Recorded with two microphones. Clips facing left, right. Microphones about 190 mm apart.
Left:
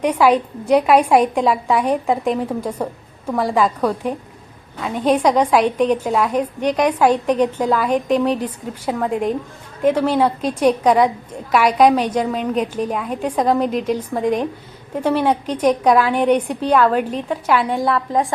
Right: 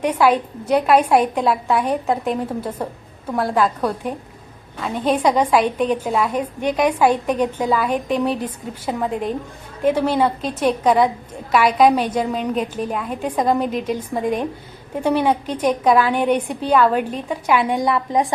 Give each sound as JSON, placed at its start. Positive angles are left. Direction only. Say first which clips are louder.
{"t": 0.7, "sound": "a woman's voice", "louder": "left 2 dB", "side_deg": -5}